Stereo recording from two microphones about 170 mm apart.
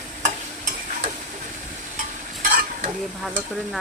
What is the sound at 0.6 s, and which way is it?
Stir, 50° right (ahead or behind).